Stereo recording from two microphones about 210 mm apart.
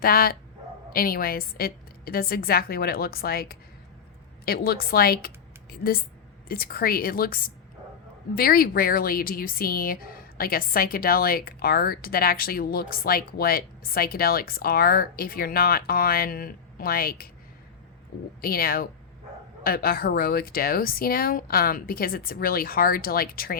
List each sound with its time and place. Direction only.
0.0 s speech: 45° left (ahead or behind)
18.4 s speech: 45° left (ahead or behind)